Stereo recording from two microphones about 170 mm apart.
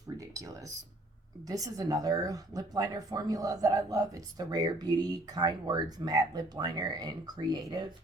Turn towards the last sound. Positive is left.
turn(degrees=-25)  # may be behind; listen again after turning